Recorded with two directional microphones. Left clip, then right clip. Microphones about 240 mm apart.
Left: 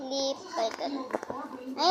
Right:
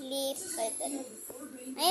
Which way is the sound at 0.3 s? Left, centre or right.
Centre.